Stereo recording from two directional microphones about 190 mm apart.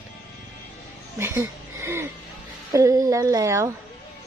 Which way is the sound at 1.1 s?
15° right (ahead or behind).